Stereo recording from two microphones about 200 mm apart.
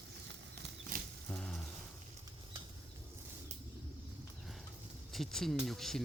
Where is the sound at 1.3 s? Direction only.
5° left (ahead or behind).